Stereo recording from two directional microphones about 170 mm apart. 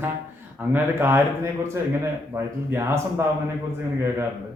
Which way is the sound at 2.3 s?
15° right (ahead or behind).